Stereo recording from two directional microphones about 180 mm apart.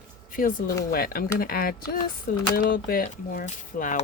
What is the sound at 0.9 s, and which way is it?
Speech, 55° left (ahead or behind).